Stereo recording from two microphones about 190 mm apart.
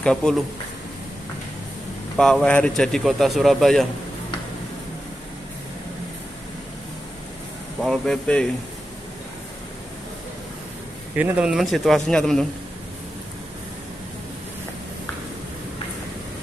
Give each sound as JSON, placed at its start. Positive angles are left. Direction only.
{"t": 0.0, "sound": "speech", "side_deg": 5}
{"t": 2.1, "sound": "speech", "side_deg": 5}
{"t": 7.8, "sound": "speech", "side_deg": 0}
{"t": 11.1, "sound": "speech", "side_deg": -5}